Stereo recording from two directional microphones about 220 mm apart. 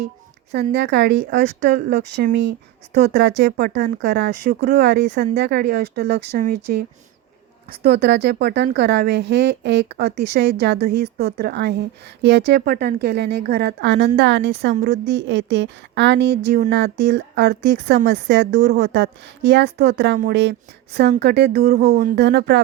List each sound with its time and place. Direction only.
0.7 s speech: 50° right (ahead or behind)
1.4 s speech: 35° right (ahead or behind)
1.9 s speech: 50° right (ahead or behind)